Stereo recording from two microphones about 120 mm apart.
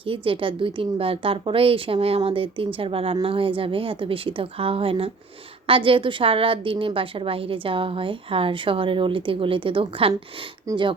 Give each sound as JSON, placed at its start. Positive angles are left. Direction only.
{"t": 0.0, "sound": "a woman's voice", "side_deg": -50}
{"t": 10.7, "sound": "speech", "side_deg": -30}